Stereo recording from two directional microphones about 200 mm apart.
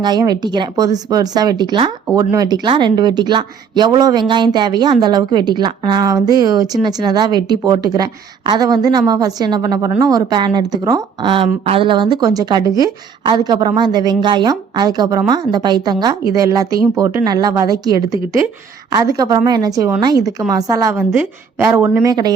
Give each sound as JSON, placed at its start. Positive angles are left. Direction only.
{"t": 0.0, "sound": "a woman's voice", "side_deg": -20}
{"t": 17.2, "sound": "a woman's voice", "side_deg": -20}